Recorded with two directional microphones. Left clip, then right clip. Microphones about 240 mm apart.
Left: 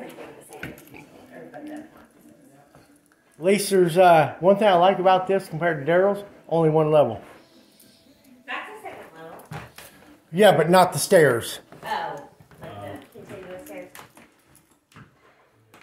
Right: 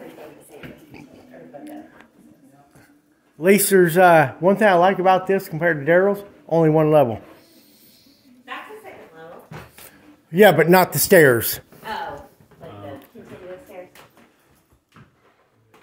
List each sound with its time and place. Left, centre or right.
3.3 s speech: right
10.3 s speech: right